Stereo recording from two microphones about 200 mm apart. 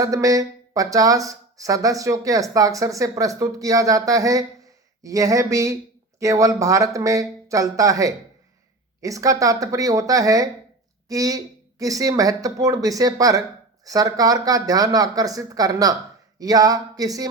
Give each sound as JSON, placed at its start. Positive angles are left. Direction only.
{"t": 0.0, "sound": "speech", "side_deg": -15}